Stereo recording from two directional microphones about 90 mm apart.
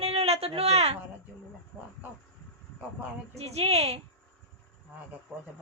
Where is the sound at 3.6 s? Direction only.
90° right.